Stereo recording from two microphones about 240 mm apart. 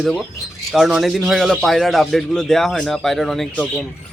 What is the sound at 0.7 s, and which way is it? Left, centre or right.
Speech, centre.